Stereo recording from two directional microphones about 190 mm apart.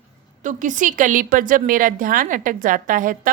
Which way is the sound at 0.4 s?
40° right (ahead or behind).